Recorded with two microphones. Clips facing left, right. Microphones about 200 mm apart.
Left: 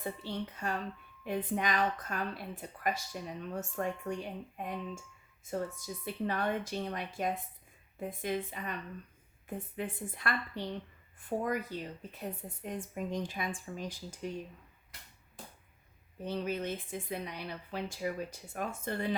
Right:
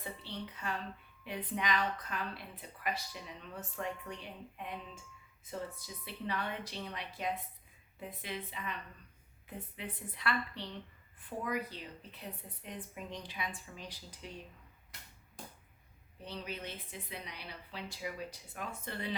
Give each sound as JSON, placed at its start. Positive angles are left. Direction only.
{"t": 0.0, "sound": "a woman's voice", "side_deg": 45}
{"t": 16.2, "sound": "a woman's voice", "side_deg": 45}